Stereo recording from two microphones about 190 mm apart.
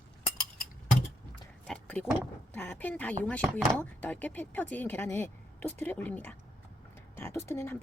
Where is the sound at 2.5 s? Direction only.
10° left (ahead or behind).